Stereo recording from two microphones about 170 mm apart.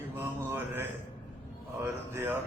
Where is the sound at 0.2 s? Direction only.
15° right (ahead or behind).